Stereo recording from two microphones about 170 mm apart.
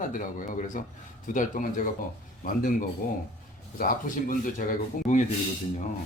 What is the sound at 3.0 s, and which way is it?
A man's voice, 55° left (ahead or behind).